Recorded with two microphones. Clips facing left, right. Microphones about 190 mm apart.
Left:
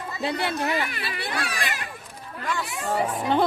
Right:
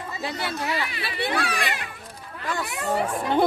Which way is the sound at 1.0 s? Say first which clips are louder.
Right 4 dB; 60° right (ahead or behind).